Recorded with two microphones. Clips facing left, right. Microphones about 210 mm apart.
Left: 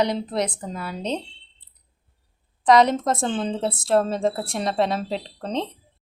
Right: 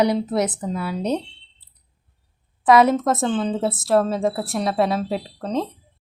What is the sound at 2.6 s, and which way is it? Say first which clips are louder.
A woman's voice: right 2 dB; 5° right (ahead or behind).